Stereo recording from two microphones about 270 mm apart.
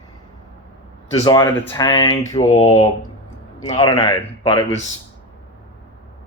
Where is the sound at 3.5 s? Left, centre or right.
Left.